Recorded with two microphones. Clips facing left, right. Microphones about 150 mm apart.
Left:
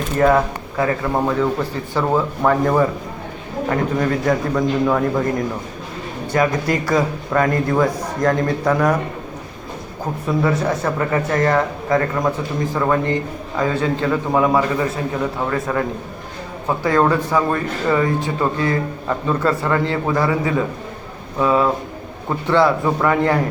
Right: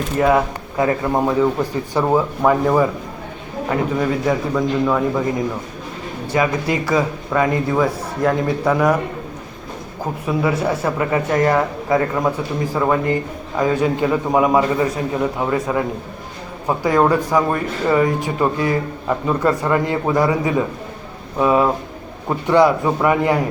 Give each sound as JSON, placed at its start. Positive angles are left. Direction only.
{"t": 0.2, "sound": "a man's voice", "side_deg": -10}
{"t": 6.3, "sound": "speech", "side_deg": -5}
{"t": 10.2, "sound": "speech", "side_deg": -10}